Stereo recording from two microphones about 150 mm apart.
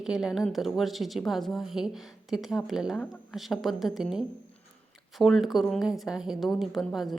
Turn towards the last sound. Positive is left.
turn(degrees=0)  # may be behind; listen again after turning